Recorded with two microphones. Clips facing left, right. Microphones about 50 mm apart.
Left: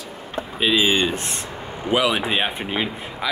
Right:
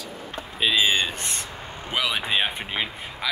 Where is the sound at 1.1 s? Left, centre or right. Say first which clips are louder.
Left 4 dB; centre.